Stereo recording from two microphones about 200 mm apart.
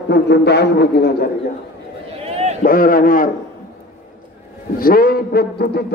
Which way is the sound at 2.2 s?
30° right (ahead or behind).